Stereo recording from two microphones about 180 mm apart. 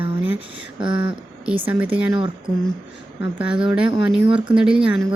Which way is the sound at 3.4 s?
5° right (ahead or behind).